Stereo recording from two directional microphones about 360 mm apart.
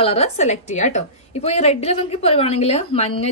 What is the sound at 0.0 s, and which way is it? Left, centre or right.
A woman's voice, centre.